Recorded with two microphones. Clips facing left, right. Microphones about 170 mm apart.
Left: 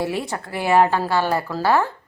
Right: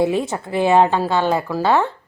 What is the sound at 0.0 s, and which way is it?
A woman's voice, 20° right (ahead or behind).